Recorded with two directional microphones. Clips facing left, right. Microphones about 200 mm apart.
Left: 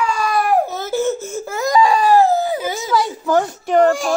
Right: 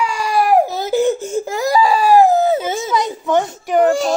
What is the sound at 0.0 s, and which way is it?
Baby cry, 10° right (ahead or behind).